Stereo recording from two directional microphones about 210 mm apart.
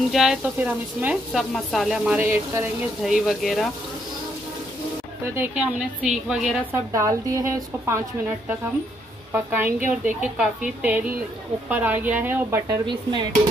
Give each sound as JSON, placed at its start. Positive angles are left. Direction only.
{"t": 0.1, "sound": "speech", "side_deg": 0}
{"t": 5.3, "sound": "speech", "side_deg": -5}
{"t": 6.9, "sound": "a woman's voice", "side_deg": -15}
{"t": 9.3, "sound": "a woman's voice", "side_deg": -10}
{"t": 12.8, "sound": "speech", "side_deg": -20}